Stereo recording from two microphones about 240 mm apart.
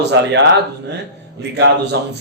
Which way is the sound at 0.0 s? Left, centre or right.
Right.